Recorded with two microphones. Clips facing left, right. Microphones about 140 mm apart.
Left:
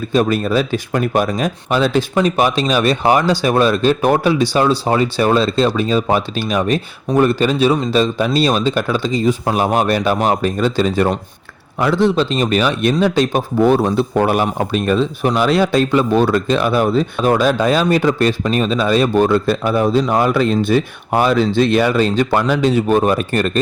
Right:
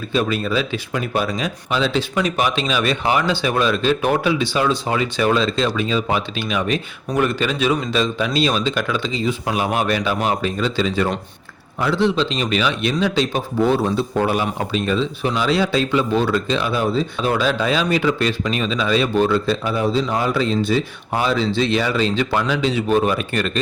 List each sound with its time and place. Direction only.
0.1 s speech: 45° left (ahead or behind)